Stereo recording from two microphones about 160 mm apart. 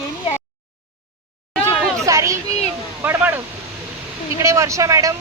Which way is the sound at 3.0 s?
15° right (ahead or behind).